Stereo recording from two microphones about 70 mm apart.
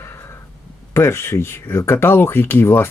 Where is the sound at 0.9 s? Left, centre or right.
Left.